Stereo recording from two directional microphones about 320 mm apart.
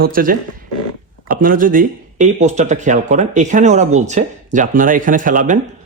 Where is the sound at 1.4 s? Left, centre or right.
Right.